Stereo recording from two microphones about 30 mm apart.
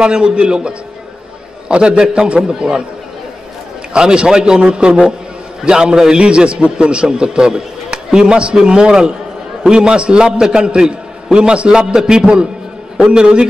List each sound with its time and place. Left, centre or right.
0.0 s a man's voice: right
2.4 s a man's voice: right
3.9 s a man's voice: right
11.9 s a man's voice: right
13.0 s a man's voice: right